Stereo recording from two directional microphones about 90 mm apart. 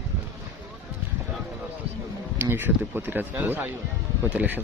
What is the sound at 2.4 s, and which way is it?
A man's voice, 25° right (ahead or behind).